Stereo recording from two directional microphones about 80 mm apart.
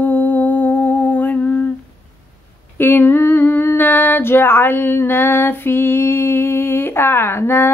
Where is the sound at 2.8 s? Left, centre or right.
Left.